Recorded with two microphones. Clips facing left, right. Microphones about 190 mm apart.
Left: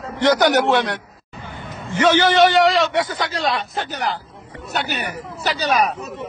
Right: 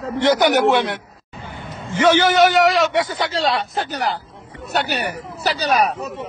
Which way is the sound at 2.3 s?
Centre (ahead or behind).